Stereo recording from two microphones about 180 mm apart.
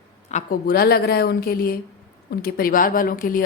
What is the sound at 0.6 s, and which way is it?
A woman's voice, 55° left (ahead or behind).